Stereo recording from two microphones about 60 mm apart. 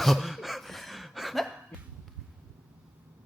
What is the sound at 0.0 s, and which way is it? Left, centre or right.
Cough, centre.